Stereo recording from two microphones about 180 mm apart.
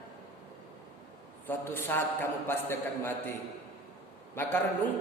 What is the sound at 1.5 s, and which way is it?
A man's voice, 10° left (ahead or behind).